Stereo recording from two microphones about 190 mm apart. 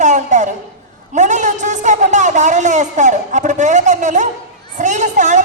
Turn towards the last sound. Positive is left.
turn(degrees=-40)  # may be behind; listen again after turning